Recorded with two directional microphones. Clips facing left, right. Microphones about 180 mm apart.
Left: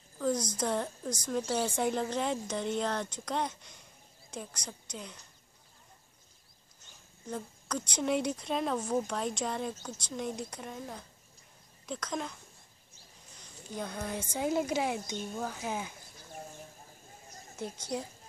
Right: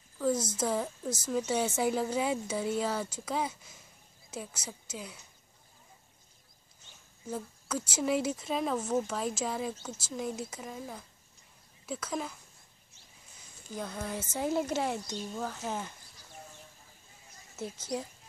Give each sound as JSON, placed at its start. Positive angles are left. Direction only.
{"t": 0.2, "sound": "a sound", "side_deg": -5}
{"t": 0.6, "sound": "a woman's voice", "side_deg": -5}
{"t": 7.2, "sound": "a woman's voice", "side_deg": -5}
{"t": 13.4, "sound": "a woman's voice", "side_deg": -5}
{"t": 16.2, "sound": "a sound", "side_deg": 50}
{"t": 17.7, "sound": "a woman's voice", "side_deg": -5}